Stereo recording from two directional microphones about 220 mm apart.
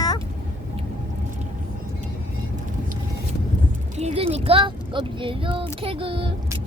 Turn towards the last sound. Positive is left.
turn(degrees=-25)  # may be behind; listen again after turning